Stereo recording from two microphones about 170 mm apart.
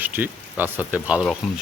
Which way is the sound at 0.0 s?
10° right (ahead or behind).